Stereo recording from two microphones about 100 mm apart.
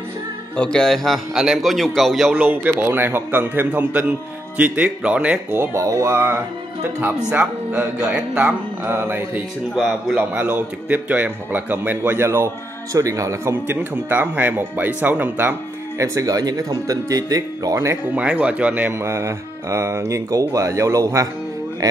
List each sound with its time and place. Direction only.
0.6 s a man's voice: 10° left (ahead or behind)
2.3 s speech: 15° right (ahead or behind)
7.2 s a man's voice: 10° right (ahead or behind)
8.9 s speech: 25° right (ahead or behind)
9.8 s a man's voice: centre (ahead or behind)
10.1 s a man's voice: 20° right (ahead or behind)
13.7 s speech: 15° right (ahead or behind)
16.0 s speech: 35° right (ahead or behind)
18.1 s a man's voice: 10° right (ahead or behind)
18.9 s speech: 25° right (ahead or behind)